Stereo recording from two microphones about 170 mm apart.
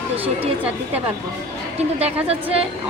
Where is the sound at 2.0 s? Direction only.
35° right (ahead or behind).